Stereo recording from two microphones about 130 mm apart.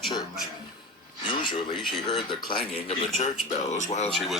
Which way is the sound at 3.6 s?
65° left (ahead or behind).